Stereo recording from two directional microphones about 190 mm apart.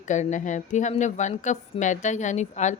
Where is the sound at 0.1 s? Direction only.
40° left (ahead or behind).